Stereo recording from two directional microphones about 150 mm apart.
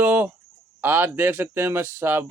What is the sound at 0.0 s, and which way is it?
Chicken, 15° right (ahead or behind).